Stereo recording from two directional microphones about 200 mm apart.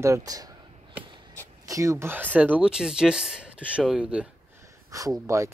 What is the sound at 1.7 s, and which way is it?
Speech, 15° right (ahead or behind).